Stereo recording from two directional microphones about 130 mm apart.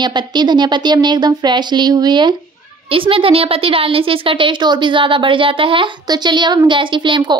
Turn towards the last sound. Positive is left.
turn(degrees=-40)  # may be behind; listen again after turning